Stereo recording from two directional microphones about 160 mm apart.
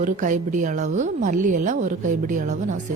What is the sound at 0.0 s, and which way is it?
A woman's voice, 55° right (ahead or behind).